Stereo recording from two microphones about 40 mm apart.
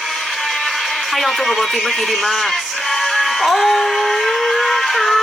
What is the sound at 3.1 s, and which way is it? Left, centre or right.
Music, centre.